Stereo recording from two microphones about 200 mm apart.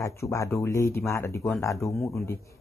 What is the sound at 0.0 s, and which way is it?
Speech, 15° left (ahead or behind).